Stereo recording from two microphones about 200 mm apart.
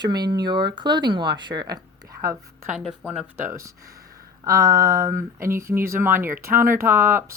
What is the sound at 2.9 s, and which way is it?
Speech, 5° right (ahead or behind).